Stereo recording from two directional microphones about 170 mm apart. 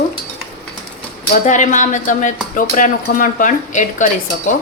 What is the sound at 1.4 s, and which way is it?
Speech, 45° left (ahead or behind).